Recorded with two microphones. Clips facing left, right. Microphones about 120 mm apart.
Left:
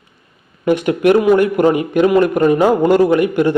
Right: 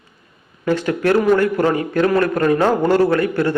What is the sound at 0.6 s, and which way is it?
A man's voice, 15° left (ahead or behind).